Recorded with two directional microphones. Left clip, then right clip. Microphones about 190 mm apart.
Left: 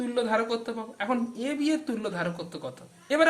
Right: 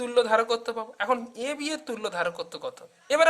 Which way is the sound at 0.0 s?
45° right (ahead or behind).